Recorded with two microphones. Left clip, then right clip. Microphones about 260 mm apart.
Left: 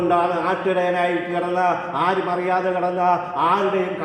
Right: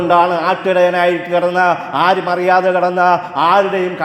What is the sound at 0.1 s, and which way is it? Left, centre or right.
A man's voice, right.